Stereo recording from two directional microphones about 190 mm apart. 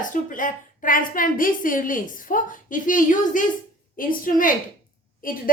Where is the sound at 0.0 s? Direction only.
45° left (ahead or behind).